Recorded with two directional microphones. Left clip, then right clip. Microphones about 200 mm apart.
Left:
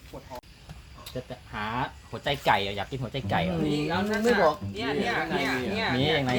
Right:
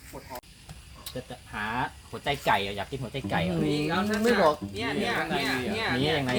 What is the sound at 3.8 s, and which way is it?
Speech, 20° left (ahead or behind).